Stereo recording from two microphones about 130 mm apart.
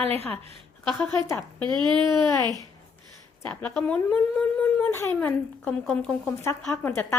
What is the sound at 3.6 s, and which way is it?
Speech, 10° left (ahead or behind).